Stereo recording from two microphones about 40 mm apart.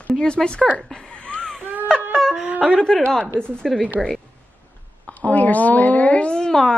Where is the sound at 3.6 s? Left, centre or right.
Centre.